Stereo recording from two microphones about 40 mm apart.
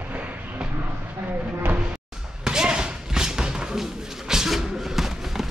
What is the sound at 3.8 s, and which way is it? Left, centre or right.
Music, centre.